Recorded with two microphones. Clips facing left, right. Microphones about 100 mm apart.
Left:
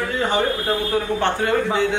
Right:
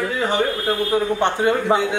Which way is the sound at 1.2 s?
20° right (ahead or behind).